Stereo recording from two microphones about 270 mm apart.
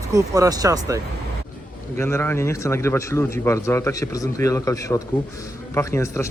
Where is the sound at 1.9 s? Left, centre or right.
Centre.